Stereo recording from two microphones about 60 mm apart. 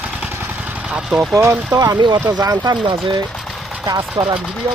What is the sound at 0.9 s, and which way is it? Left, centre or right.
Speech, centre.